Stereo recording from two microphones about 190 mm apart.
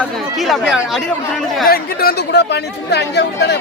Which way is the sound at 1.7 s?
50° left (ahead or behind).